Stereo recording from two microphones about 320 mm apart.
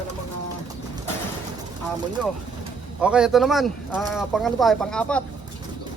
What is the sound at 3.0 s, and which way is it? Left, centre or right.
Speech, centre.